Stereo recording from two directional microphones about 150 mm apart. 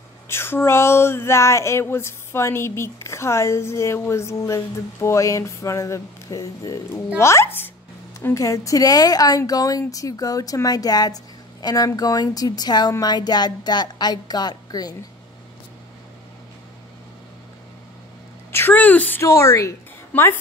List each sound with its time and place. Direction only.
0.3 s a sound: 15° left (ahead or behind)
8.2 s speech: 20° left (ahead or behind)
18.5 s a woman's voice: 15° left (ahead or behind)